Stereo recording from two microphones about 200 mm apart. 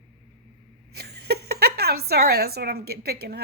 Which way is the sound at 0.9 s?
55° right (ahead or behind).